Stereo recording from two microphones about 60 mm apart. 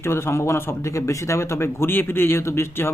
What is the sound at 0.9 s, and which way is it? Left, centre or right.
Speech, left.